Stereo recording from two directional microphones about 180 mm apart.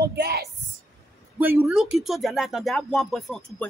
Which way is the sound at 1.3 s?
10° right (ahead or behind).